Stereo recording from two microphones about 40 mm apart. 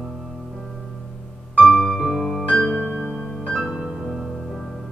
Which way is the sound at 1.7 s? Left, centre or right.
Centre.